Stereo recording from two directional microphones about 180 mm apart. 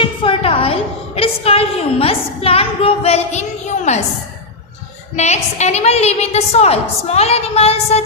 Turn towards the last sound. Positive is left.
turn(degrees=35)  # may be behind; listen again after turning